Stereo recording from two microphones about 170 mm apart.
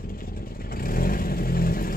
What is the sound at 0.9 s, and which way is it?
Vehicle, 60° left (ahead or behind).